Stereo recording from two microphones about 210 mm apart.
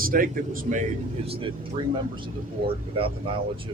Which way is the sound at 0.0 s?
40° right (ahead or behind).